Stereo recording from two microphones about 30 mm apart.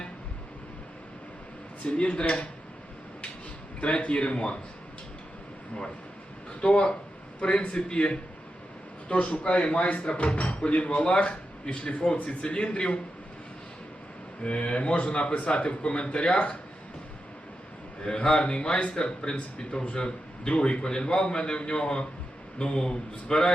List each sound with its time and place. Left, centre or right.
1.8 s speech: left
3.8 s a man's voice: left
6.6 s a man's voice: left
14.4 s a man's voice: left
18.0 s a man's voice: left
20.6 s a man's voice: left